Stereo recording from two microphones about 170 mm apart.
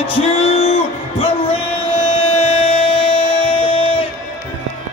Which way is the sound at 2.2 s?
35° left (ahead or behind).